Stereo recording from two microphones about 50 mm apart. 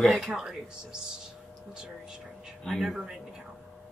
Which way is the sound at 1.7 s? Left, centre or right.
Centre.